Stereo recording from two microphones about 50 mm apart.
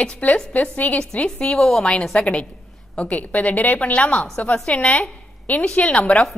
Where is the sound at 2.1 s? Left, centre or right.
Left.